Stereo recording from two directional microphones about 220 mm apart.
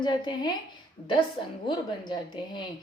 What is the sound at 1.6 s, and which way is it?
A woman's voice, 20° left (ahead or behind).